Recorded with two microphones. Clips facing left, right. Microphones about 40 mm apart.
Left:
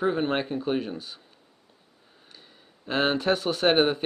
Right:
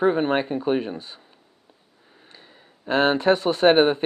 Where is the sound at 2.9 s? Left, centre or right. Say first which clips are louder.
Right 5 dB; centre.